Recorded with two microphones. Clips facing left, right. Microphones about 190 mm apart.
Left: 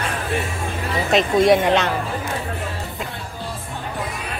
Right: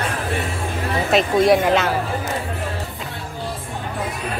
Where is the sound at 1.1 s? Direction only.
Centre (ahead or behind).